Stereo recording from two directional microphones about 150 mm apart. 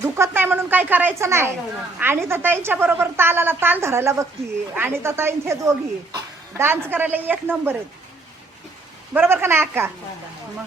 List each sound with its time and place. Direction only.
0.0 s a sound: 15° right (ahead or behind)
2.0 s speech: 15° right (ahead or behind)
9.1 s speech: 15° right (ahead or behind)